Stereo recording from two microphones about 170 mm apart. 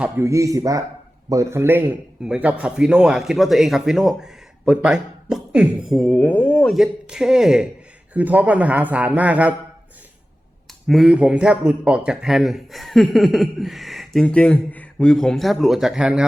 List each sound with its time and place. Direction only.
0.0 s a man's voice: 15° right (ahead or behind)
10.8 s a man's voice: centre (ahead or behind)